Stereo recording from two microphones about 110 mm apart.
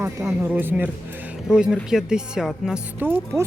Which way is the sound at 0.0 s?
20° right (ahead or behind).